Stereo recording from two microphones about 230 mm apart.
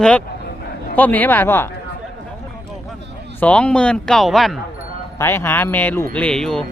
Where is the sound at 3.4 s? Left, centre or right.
Centre.